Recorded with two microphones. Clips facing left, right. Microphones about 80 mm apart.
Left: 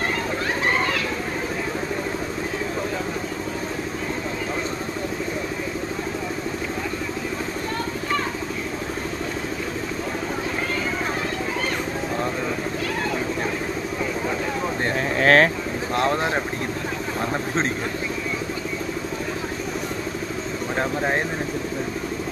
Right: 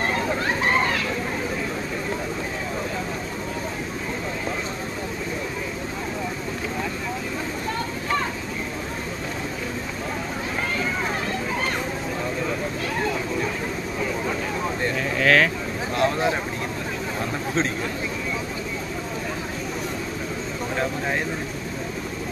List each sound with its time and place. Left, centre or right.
15.0 s vehicle: left